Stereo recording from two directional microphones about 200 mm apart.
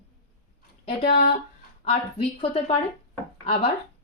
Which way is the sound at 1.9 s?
30° left (ahead or behind).